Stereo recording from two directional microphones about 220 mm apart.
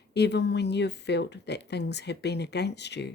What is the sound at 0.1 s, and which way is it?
Speech, 50° left (ahead or behind).